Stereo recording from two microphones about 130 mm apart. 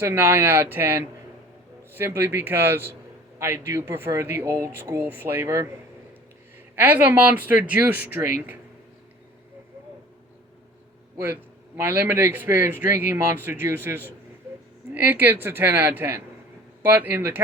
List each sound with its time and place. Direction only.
0.0 s speech: 15° right (ahead or behind)
6.7 s speech: 15° right (ahead or behind)
11.8 s speech: 15° right (ahead or behind)